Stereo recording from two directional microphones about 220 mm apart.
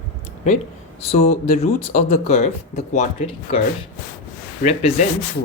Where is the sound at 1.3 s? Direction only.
30° left (ahead or behind).